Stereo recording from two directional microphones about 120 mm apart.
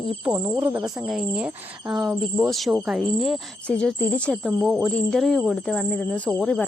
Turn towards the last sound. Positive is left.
turn(degrees=10)  # may be behind; listen again after turning